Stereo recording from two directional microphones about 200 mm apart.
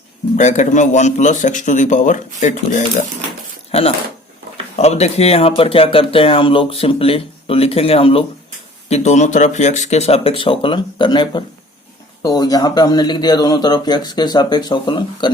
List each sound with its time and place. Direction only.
0.3 s speech: 40° left (ahead or behind)